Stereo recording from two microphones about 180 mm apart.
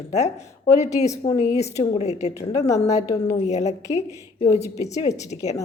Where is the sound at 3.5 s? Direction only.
40° left (ahead or behind).